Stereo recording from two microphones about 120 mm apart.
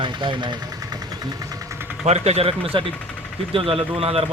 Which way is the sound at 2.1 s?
60° right (ahead or behind).